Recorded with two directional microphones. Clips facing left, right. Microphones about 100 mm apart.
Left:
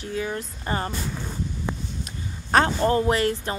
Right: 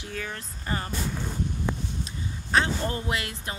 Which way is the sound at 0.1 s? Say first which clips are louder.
Left 7 dB; 20° left (ahead or behind).